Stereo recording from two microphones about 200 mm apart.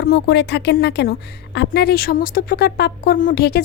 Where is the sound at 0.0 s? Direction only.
55° left (ahead or behind).